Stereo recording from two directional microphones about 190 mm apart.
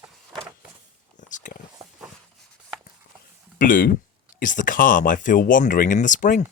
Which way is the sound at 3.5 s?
45° left (ahead or behind).